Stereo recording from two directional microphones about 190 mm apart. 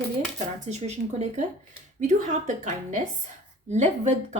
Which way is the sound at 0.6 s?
35° right (ahead or behind).